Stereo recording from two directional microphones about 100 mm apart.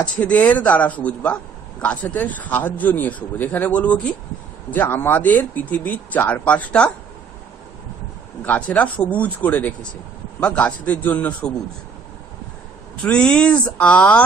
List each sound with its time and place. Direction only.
0.0 s speech: 15° left (ahead or behind)
8.5 s speech: 15° left (ahead or behind)
13.0 s speech: 10° left (ahead or behind)